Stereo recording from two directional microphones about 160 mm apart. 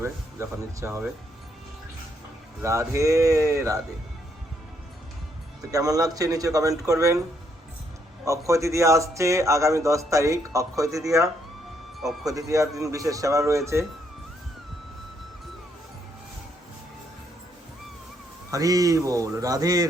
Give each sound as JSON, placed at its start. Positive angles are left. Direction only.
{"t": 0.0, "sound": "speech", "side_deg": -15}
{"t": 2.6, "sound": "a man's voice", "side_deg": -15}
{"t": 5.7, "sound": "a man's voice", "side_deg": -20}
{"t": 8.2, "sound": "a man's voice", "side_deg": -20}
{"t": 18.5, "sound": "a man's voice", "side_deg": -20}